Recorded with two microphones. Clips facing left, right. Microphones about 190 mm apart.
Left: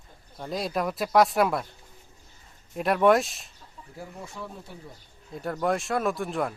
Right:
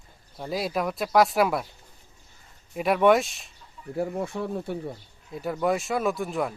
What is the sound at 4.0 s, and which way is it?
Speech, 65° right (ahead or behind).